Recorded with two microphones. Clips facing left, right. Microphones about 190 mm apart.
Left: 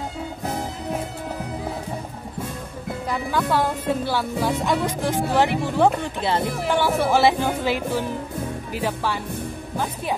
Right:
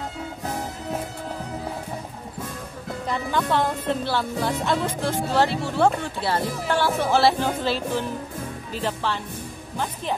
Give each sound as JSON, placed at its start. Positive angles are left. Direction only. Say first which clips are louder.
{"t": 3.1, "sound": "speech", "louder": "left 1 dB", "side_deg": 5}